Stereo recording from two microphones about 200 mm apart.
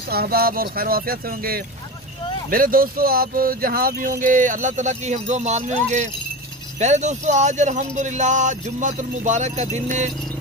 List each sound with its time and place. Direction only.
0.1 s speech: 50° right (ahead or behind)